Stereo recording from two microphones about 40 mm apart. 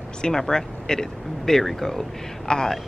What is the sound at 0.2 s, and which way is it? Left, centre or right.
Speech, centre.